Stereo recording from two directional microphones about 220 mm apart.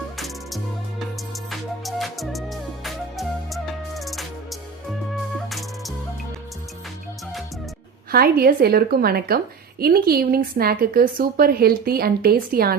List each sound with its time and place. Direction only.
0.2 s music: centre (ahead or behind)
8.1 s a woman's voice: 45° right (ahead or behind)